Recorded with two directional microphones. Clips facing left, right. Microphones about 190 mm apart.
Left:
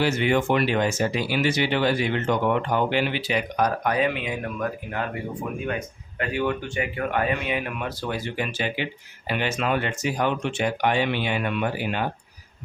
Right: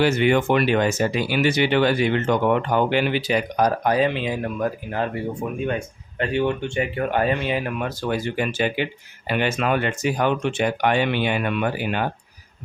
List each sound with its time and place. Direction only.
0.0 s speech: 60° right (ahead or behind)
2.7 s speech: 50° right (ahead or behind)